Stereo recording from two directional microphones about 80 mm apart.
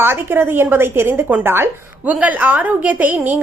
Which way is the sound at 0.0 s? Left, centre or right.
Right.